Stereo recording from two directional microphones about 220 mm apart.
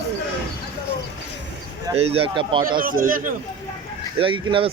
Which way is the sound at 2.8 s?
40° right (ahead or behind).